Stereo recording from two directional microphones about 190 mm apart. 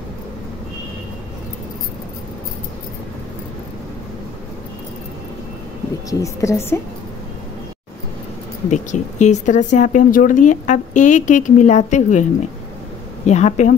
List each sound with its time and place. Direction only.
6.0 s speech: 15° left (ahead or behind)
8.6 s speech: 40° left (ahead or behind)
13.3 s speech: 35° left (ahead or behind)